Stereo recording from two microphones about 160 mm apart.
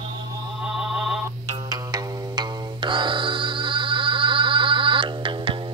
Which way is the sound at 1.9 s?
25° right (ahead or behind).